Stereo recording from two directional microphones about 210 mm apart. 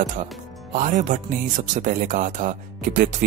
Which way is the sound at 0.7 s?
35° right (ahead or behind).